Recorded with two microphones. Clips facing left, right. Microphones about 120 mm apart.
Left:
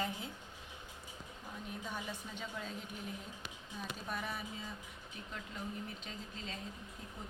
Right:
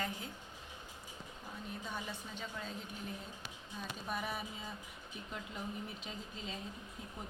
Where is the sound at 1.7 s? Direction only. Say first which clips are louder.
Even; 10° left (ahead or behind).